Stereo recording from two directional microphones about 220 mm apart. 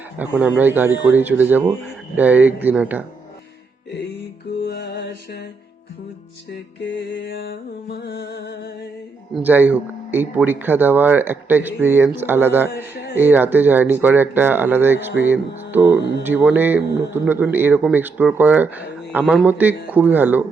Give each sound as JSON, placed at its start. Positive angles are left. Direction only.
{"t": 0.2, "sound": "speech", "side_deg": -5}
{"t": 4.6, "sound": "music", "side_deg": 45}
{"t": 6.5, "sound": "music", "side_deg": 50}
{"t": 9.3, "sound": "speech", "side_deg": -10}